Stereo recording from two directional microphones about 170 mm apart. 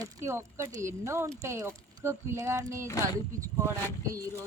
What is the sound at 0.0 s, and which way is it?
Speech, 15° right (ahead or behind).